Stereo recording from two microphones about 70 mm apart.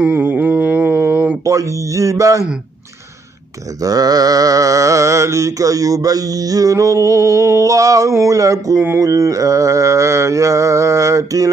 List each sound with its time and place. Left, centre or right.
0.0 s a sound: right
1.4 s speech: right
3.8 s mantra: right